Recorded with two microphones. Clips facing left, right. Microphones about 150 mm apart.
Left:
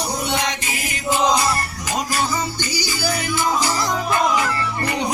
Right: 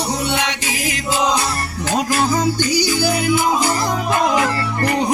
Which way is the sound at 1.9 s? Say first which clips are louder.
Right 5 dB; 50° right (ahead or behind).